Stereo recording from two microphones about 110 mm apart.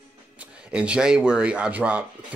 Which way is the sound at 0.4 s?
10° right (ahead or behind).